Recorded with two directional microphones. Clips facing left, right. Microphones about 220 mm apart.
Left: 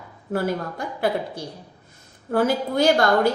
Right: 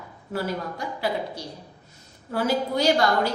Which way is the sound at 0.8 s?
55° left (ahead or behind).